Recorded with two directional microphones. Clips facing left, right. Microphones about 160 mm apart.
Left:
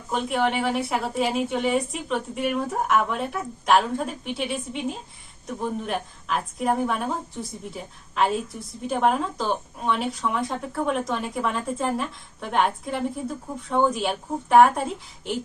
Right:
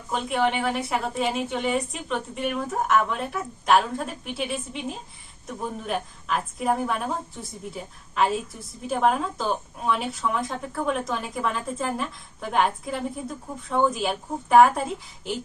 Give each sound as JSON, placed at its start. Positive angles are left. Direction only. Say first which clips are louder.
{"t": 0.1, "sound": "speech", "louder": "even", "side_deg": 0}